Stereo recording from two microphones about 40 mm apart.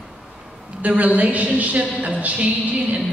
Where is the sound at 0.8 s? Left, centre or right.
Right.